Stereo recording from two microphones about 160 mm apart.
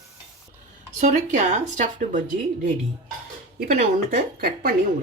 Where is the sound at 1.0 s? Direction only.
50° right (ahead or behind).